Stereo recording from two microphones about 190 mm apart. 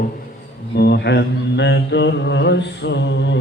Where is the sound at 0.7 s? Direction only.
60° left (ahead or behind).